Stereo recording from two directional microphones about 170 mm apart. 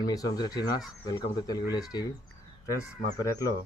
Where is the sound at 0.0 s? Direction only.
20° left (ahead or behind).